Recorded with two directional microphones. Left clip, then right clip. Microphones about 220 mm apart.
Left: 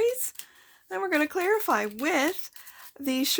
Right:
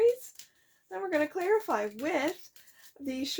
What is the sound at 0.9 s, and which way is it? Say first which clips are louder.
Speech: left 4 dB; 45° left (ahead or behind).